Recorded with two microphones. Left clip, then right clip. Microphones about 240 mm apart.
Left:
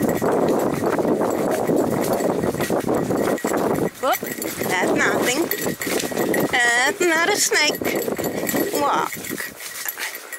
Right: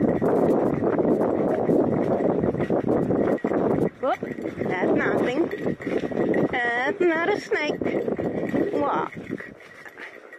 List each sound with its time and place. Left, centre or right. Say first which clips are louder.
0.0 s clip-clop: left 2 dB; centre
2.9 s horse: even; centre
4.6 s dog: left 4 dB; centre
5.6 s livestock: left 3 dB; centre
8.1 s clip-clop: left 2 dB; centre